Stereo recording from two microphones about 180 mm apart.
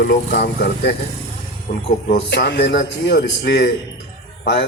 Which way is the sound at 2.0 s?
65° left (ahead or behind).